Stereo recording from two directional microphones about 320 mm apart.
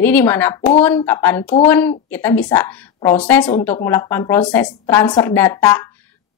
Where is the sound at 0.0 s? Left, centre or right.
Centre.